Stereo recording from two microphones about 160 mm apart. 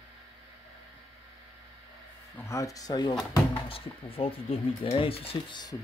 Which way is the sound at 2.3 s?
20° left (ahead or behind).